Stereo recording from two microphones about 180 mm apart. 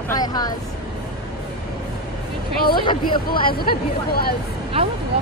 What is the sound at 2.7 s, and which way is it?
Speech, 25° left (ahead or behind).